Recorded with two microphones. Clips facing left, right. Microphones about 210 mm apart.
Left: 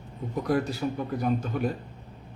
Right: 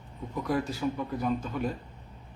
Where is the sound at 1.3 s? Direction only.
60° left (ahead or behind).